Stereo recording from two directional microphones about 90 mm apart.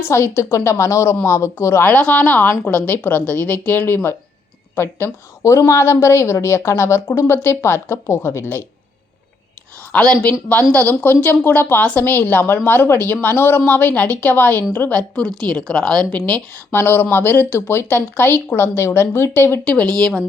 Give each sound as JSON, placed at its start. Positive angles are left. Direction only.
{"t": 0.0, "sound": "a woman's voice", "side_deg": 30}
{"t": 1.9, "sound": "a woman's voice", "side_deg": 20}
{"t": 5.4, "sound": "a woman's voice", "side_deg": 35}
{"t": 9.9, "sound": "a woman's voice", "side_deg": 10}
{"t": 19.6, "sound": "speech", "side_deg": 10}